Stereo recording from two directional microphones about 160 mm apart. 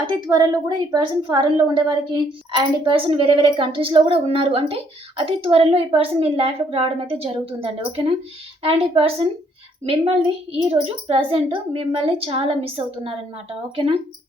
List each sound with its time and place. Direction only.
0.1 s a woman's voice: 25° right (ahead or behind)